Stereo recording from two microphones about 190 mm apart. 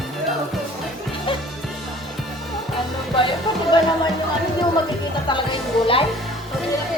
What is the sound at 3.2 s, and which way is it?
Music, 25° left (ahead or behind).